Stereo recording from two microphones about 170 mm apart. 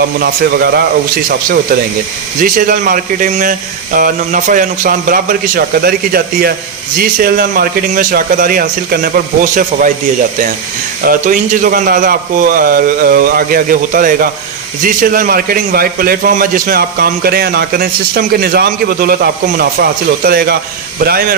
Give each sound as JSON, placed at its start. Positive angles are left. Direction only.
{"t": 0.2, "sound": "a man's voice", "side_deg": -65}
{"t": 2.4, "sound": "a man's voice", "side_deg": -55}
{"t": 11.0, "sound": "a man's voice", "side_deg": -50}